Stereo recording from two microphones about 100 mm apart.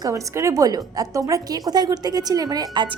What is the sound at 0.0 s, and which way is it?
A woman's voice, 30° right (ahead or behind).